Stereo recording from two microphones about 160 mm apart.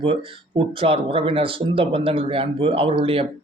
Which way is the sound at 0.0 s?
35° right (ahead or behind).